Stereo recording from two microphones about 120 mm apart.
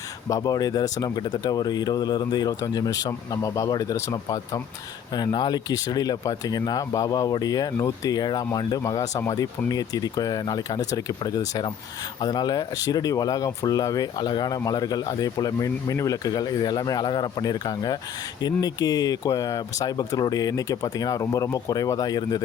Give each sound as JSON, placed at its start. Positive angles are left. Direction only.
{"t": 0.3, "sound": "speech", "side_deg": 30}